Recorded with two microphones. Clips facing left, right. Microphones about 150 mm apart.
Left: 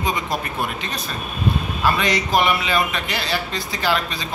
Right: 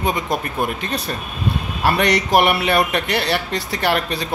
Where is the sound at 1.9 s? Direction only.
70° right (ahead or behind).